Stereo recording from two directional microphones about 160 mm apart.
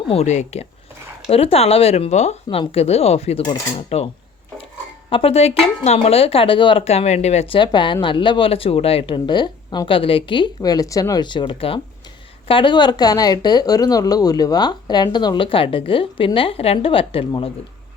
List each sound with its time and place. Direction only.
0.1 s a woman's voice: 45° left (ahead or behind)